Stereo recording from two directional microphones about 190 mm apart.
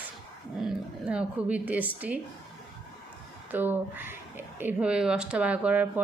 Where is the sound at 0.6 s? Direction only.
5° right (ahead or behind).